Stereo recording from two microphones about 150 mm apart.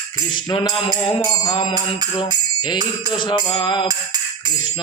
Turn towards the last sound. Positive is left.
turn(degrees=30)  # may be behind; listen again after turning